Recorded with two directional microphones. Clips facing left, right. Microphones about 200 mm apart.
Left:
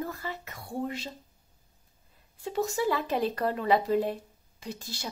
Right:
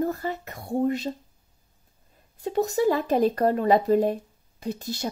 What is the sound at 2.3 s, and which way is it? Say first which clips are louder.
Speech: right 6 dB; 40° right (ahead or behind).